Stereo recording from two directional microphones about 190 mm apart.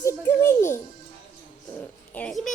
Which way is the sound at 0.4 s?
15° left (ahead or behind).